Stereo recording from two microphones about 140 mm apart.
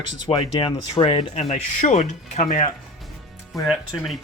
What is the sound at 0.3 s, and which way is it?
Speech, 35° left (ahead or behind).